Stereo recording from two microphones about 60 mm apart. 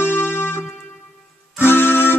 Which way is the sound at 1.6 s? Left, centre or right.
Left.